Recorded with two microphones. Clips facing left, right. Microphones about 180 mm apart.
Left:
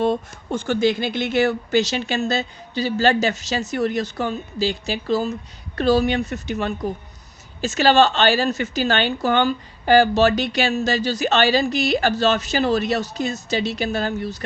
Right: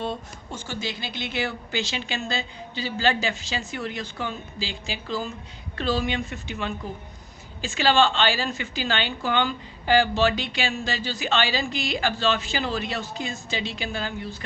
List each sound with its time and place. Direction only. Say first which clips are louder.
0.0 s speech: left 10 dB; 55° left (ahead or behind)